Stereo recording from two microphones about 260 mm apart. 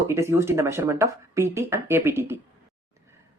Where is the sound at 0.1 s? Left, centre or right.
Centre.